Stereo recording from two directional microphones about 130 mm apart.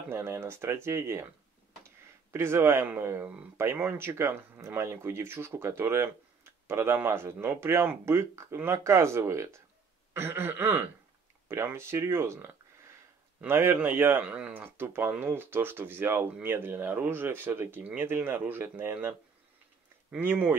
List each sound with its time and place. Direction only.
0.1 s speech: 20° right (ahead or behind)
2.3 s speech: 20° right (ahead or behind)